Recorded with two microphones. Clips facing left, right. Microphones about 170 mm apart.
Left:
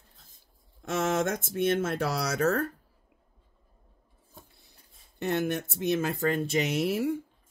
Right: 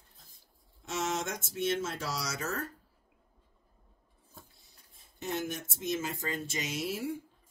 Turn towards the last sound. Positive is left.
turn(degrees=65)  # may be behind; listen again after turning